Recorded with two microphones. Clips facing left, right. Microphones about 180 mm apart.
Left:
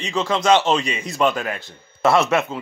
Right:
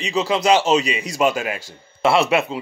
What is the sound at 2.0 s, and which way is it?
Speech, 30° right (ahead or behind).